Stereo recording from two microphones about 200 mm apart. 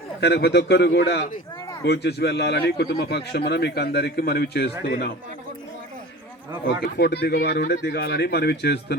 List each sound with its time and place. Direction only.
0.2 s a man's voice: 55° left (ahead or behind)
6.8 s a man's voice: 55° left (ahead or behind)